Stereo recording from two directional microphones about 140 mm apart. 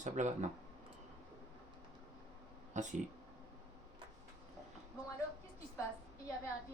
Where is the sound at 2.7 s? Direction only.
60° right (ahead or behind).